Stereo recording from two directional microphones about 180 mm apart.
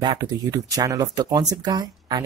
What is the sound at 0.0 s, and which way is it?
Speech, 20° right (ahead or behind).